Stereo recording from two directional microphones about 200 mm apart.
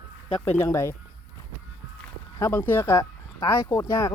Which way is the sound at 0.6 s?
15° left (ahead or behind).